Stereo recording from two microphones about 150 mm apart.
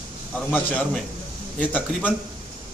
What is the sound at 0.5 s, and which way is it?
Speech, 10° left (ahead or behind).